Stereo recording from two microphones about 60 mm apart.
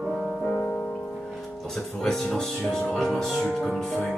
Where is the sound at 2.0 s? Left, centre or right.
Centre.